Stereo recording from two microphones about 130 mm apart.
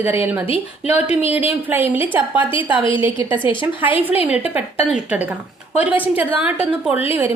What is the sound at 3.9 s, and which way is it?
A woman's voice, 15° right (ahead or behind).